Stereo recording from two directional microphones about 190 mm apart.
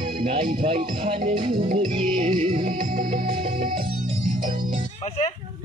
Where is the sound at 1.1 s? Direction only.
45° right (ahead or behind).